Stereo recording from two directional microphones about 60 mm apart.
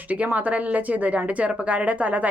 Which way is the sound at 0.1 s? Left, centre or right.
Right.